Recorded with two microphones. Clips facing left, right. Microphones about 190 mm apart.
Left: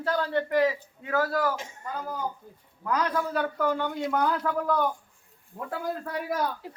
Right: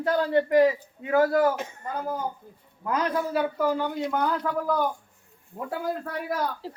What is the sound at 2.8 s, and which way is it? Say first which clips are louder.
Speech: right 1 dB; 25° right (ahead or behind).